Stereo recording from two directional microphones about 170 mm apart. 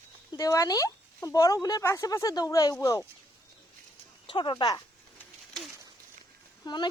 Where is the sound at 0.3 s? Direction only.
20° left (ahead or behind).